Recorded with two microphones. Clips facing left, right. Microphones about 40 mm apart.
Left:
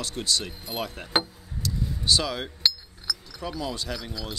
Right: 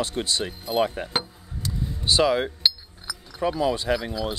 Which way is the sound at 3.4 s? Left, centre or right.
Right.